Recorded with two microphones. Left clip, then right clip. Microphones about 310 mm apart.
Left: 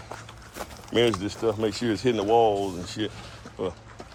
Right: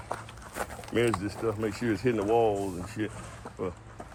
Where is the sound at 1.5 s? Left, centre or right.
Centre.